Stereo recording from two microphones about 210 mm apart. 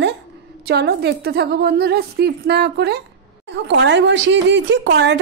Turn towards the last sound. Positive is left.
turn(degrees=-55)  # may be behind; listen again after turning